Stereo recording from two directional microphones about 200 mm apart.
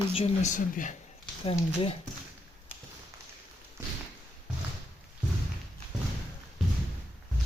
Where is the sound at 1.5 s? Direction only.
25° left (ahead or behind).